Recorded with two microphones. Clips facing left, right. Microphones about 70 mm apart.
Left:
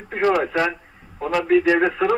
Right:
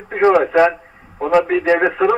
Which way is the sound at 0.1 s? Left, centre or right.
Right.